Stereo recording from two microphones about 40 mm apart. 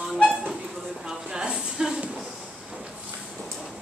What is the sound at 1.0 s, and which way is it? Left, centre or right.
Speech, right.